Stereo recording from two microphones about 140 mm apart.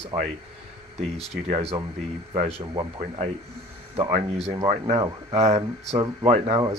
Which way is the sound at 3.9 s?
50° right (ahead or behind).